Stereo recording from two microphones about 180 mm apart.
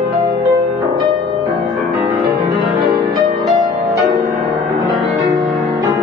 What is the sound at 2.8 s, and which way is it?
Music, 25° right (ahead or behind).